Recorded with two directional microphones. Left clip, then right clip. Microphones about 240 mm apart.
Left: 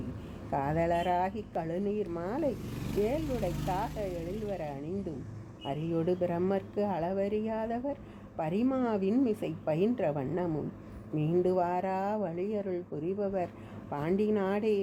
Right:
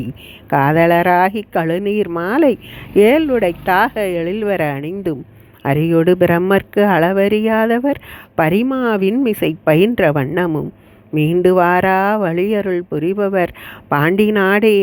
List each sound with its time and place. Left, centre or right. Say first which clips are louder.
0.5 s speech: right 18 dB; right